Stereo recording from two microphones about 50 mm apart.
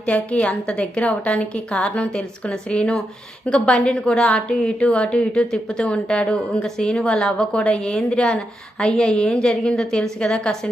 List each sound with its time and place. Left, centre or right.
0.0 s a woman's voice: left